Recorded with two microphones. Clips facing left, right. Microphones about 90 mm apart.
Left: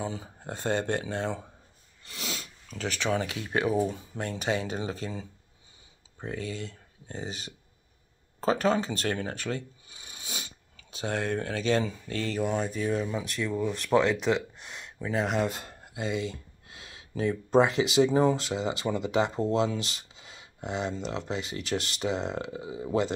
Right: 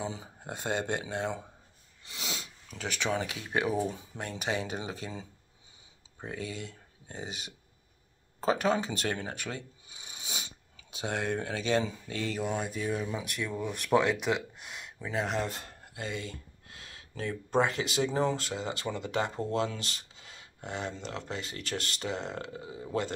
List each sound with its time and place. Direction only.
0.0 s speech: 15° right (ahead or behind)
6.2 s speech: 10° right (ahead or behind); by 22.8 s 10° left (ahead or behind)